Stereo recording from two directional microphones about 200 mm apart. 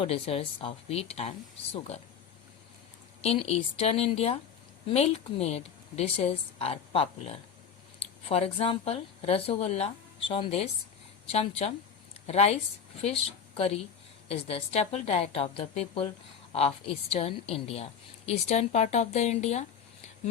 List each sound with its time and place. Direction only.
0.0 s speech: 30° left (ahead or behind)
3.2 s a woman's voice: 30° left (ahead or behind)